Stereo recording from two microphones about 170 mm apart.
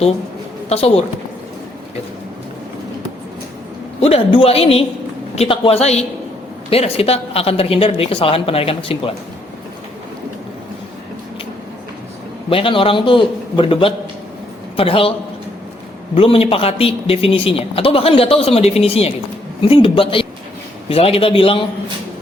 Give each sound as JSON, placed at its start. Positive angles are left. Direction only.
{"t": 0.7, "sound": "speech", "side_deg": 35}
{"t": 4.0, "sound": "speech", "side_deg": 35}
{"t": 12.5, "sound": "speech", "side_deg": 30}
{"t": 16.1, "sound": "speech", "side_deg": 35}